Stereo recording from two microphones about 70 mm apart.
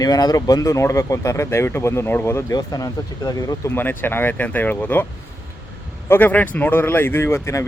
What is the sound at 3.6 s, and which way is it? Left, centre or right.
Speech, left.